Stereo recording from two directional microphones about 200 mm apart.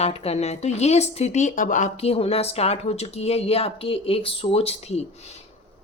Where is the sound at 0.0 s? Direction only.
30° left (ahead or behind).